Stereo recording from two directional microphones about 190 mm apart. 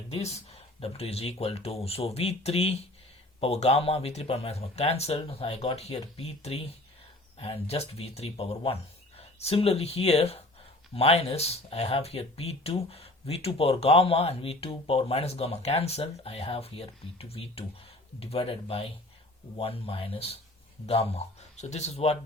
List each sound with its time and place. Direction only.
0.1 s speech: 35° left (ahead or behind)